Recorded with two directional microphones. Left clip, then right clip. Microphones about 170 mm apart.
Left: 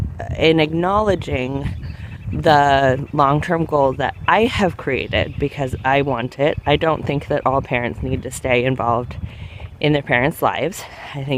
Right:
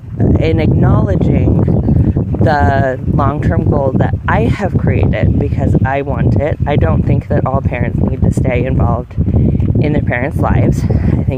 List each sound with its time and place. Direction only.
0.3 s speech: 25° left (ahead or behind)